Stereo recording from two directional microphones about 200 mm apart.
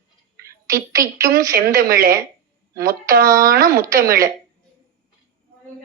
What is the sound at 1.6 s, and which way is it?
Speech, 45° right (ahead or behind).